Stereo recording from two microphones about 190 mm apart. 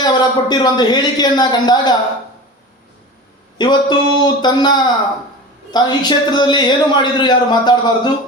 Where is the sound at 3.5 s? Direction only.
25° left (ahead or behind).